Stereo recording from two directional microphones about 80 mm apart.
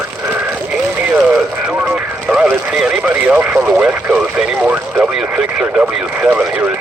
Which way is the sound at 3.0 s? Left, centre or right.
Right.